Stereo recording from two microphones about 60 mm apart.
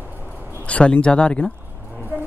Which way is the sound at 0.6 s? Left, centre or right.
Left.